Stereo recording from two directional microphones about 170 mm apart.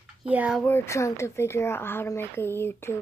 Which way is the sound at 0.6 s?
15° left (ahead or behind).